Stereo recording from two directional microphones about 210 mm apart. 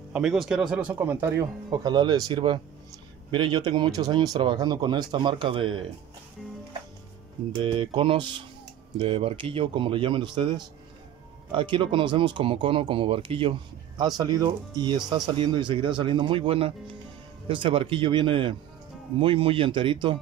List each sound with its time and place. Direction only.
0.1 s speech: centre (ahead or behind); by 5.9 s 25° right (ahead or behind)
7.6 s speech: 25° right (ahead or behind)